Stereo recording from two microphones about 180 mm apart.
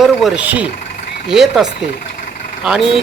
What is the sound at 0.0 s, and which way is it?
Speech, centre (ahead or behind).